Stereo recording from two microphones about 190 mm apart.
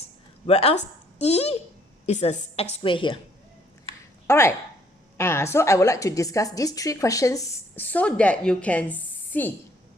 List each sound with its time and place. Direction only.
0.4 s a woman's voice: 30° left (ahead or behind)
4.3 s a woman's voice: 15° left (ahead or behind)